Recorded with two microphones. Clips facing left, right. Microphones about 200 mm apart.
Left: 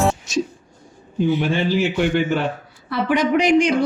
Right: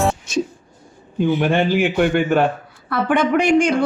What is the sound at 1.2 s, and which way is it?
A man's voice, 55° right (ahead or behind).